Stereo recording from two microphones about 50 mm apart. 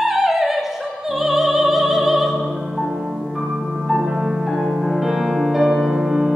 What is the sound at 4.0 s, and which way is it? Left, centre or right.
Music, centre.